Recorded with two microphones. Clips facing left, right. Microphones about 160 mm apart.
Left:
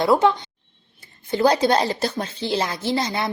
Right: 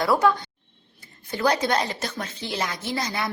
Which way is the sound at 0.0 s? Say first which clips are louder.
Left 3 dB; 25° left (ahead or behind).